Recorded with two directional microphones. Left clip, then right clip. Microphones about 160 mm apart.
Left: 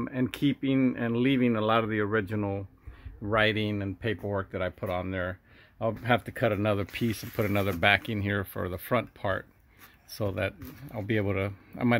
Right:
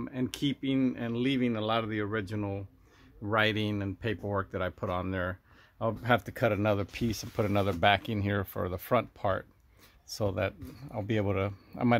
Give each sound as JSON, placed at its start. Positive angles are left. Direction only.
{"t": 0.0, "sound": "speech", "side_deg": 25}
{"t": 3.3, "sound": "speech", "side_deg": 5}